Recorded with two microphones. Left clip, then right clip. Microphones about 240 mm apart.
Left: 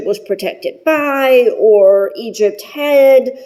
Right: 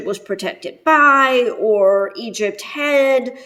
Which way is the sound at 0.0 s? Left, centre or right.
Centre.